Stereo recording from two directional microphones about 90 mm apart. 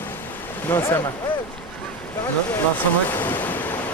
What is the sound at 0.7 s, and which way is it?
Speech, 30° left (ahead or behind).